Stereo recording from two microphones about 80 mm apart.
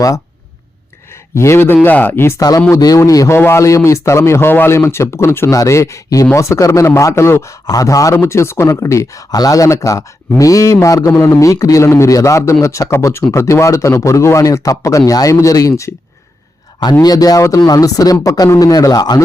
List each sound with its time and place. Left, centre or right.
1.4 s speech: left
2.4 s a man's voice: left
7.7 s speech: left
8.1 s a man's voice: left
17.0 s speech: left